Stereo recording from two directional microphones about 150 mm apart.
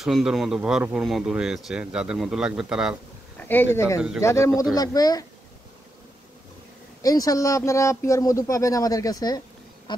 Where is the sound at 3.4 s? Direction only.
15° left (ahead or behind).